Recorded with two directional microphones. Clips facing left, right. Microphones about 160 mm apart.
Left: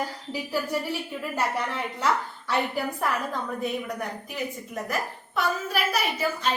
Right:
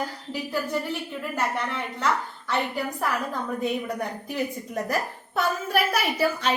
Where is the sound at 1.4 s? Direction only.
10° left (ahead or behind).